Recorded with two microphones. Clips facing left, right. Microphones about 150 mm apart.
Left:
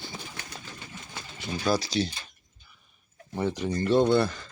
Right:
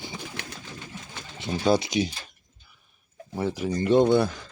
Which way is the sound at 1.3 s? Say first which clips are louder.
Right 4 dB; 25° right (ahead or behind).